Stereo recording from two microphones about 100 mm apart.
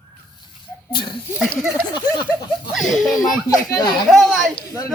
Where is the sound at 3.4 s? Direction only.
35° left (ahead or behind).